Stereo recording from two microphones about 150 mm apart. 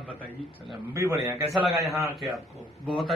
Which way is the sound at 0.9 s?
20° right (ahead or behind).